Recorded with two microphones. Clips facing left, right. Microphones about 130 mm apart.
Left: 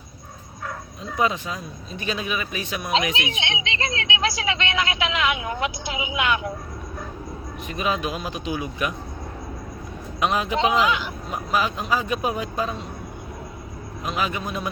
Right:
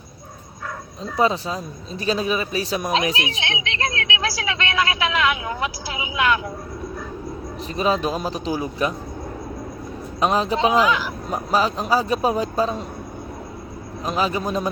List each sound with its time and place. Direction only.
1.1 s speech: 30° right (ahead or behind)
3.4 s speech: 25° left (ahead or behind)
7.7 s speech: 35° right (ahead or behind)
10.2 s speech: 35° right (ahead or behind)
14.0 s speech: 35° right (ahead or behind)